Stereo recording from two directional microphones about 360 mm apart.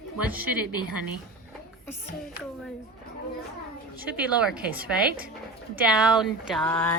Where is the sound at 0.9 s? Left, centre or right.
Right.